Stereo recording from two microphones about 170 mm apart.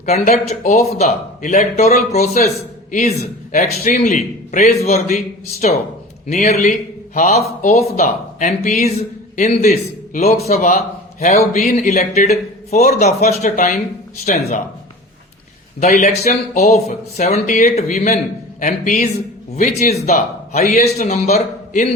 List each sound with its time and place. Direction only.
0.0 s a man's voice: 40° left (ahead or behind)
15.8 s speech: 45° left (ahead or behind)